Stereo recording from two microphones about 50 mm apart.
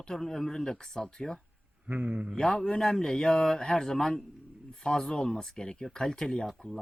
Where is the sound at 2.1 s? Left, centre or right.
Right.